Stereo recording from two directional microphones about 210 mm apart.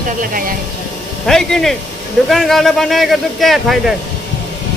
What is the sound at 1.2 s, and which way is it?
Speech, centre (ahead or behind).